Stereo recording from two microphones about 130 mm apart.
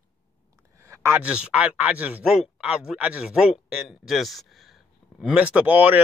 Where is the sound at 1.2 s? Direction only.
5° right (ahead or behind).